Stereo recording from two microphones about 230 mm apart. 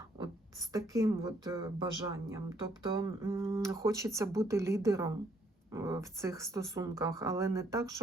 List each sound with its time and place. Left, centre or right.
0.2 s speech: centre